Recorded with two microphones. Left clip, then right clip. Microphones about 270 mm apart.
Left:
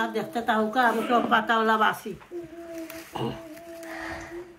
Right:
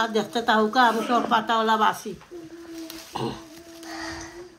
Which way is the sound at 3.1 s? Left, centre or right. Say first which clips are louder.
Right 2 dB; right.